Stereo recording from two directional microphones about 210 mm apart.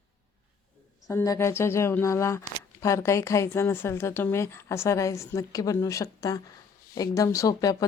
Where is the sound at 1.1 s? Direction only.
10° left (ahead or behind).